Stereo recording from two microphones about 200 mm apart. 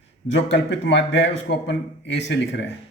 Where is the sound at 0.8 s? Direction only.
60° left (ahead or behind).